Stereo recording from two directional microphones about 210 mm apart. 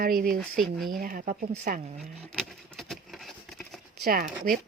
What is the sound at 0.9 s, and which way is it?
Speech, 40° right (ahead or behind).